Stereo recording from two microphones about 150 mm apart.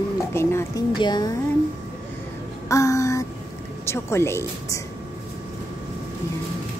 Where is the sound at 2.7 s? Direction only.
20° left (ahead or behind).